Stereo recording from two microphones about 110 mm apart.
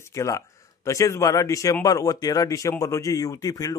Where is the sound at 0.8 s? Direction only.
30° left (ahead or behind).